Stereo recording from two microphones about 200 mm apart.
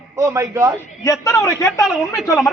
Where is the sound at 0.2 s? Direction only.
15° right (ahead or behind).